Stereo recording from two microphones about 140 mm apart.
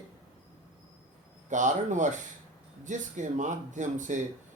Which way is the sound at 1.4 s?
65° right (ahead or behind).